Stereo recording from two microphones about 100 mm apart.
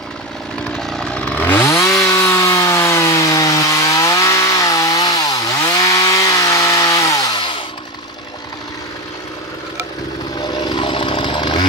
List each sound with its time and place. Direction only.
0.7 s chainsaw: 5° left (ahead or behind); by 7.3 s 35° left (ahead or behind)
10.4 s chainsaw: 45° left (ahead or behind)